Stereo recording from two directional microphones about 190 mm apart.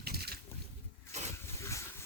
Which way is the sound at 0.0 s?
55° right (ahead or behind).